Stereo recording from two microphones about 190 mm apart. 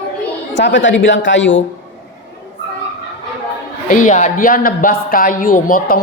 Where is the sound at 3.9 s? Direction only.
45° left (ahead or behind).